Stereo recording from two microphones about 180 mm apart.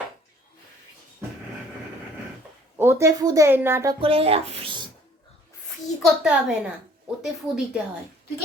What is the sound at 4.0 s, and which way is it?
Speech, 30° right (ahead or behind).